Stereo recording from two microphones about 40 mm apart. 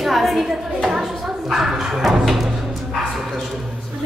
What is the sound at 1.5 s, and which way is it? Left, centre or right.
Bow-wow, centre.